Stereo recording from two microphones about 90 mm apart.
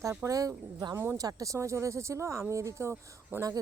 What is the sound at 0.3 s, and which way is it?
Speech, 40° right (ahead or behind).